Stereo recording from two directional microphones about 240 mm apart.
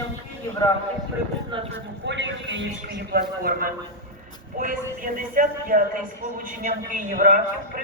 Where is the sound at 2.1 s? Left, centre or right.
Right.